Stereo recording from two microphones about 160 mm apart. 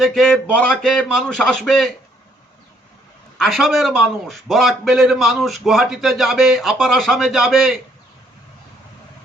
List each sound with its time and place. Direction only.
0.0 s a man's voice: centre (ahead or behind)
3.3 s a man's voice: centre (ahead or behind)